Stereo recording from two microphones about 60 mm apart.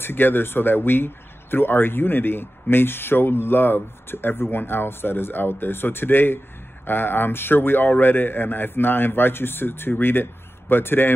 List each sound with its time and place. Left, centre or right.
0.0 s speech: left